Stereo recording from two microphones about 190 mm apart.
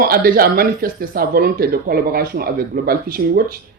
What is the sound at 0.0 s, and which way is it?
Speech, 50° right (ahead or behind).